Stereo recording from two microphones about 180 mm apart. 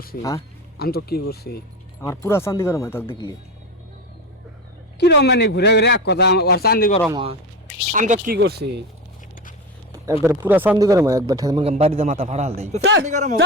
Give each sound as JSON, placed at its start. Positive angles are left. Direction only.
{"t": 0.2, "sound": "speech", "side_deg": 20}
{"t": 0.8, "sound": "speech", "side_deg": 60}
{"t": 2.0, "sound": "speech", "side_deg": 15}
{"t": 4.9, "sound": "speech", "side_deg": 65}
{"t": 7.1, "sound": "speech", "side_deg": -30}
{"t": 7.9, "sound": "speech", "side_deg": -45}
{"t": 8.4, "sound": "speech", "side_deg": -65}
{"t": 10.1, "sound": "speech", "side_deg": -15}
{"t": 11.6, "sound": "a man's voice", "side_deg": -35}
{"t": 12.8, "sound": "speech", "side_deg": -90}
{"t": 13.1, "sound": "speech", "side_deg": -45}